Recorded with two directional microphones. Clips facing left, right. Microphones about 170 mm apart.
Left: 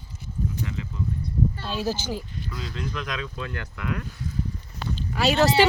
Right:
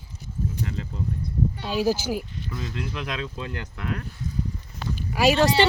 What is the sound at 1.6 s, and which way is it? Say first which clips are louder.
Speech: right 4 dB; 10° right (ahead or behind).